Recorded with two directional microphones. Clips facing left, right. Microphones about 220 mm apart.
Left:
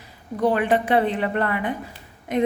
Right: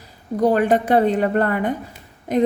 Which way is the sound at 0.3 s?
40° right (ahead or behind).